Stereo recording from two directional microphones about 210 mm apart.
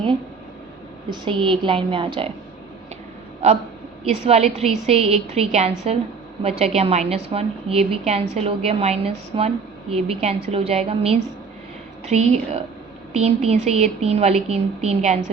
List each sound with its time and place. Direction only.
1.1 s a woman's voice: 25° right (ahead or behind)
4.0 s a woman's voice: 30° right (ahead or behind)